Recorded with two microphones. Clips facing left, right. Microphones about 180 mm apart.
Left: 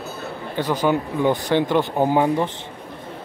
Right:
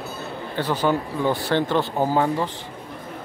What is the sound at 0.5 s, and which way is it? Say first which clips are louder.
Speech: left 2 dB; 15° left (ahead or behind).